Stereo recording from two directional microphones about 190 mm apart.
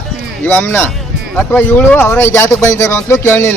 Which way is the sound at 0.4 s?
10° left (ahead or behind).